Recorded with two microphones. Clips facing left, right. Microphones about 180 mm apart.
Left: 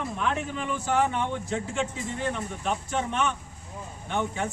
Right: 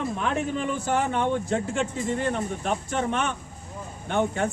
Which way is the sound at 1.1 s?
55° right (ahead or behind).